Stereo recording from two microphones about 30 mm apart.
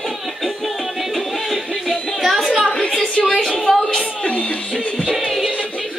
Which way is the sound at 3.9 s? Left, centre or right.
Left.